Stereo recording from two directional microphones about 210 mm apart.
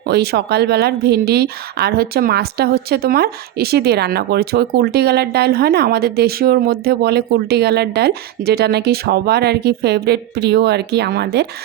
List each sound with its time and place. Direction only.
0.0 s a woman's voice: 50° right (ahead or behind)